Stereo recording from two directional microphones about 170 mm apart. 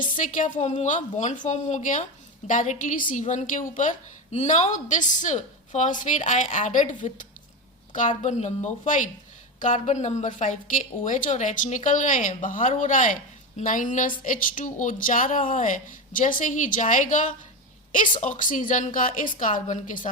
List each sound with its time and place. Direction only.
0.0 s a woman's voice: 50° left (ahead or behind)